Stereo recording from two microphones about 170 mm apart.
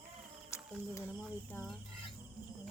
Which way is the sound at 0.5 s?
15° left (ahead or behind).